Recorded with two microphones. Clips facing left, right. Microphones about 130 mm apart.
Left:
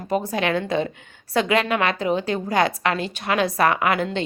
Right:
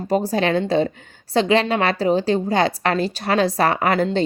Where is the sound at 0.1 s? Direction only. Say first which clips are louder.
Right 3 dB; 30° right (ahead or behind).